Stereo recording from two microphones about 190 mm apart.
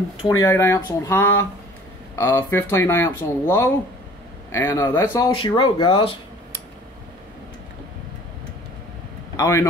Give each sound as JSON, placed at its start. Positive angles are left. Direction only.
{"t": 0.2, "sound": "speech", "side_deg": 15}
{"t": 5.3, "sound": "speech", "side_deg": 25}
{"t": 9.4, "sound": "speech", "side_deg": 15}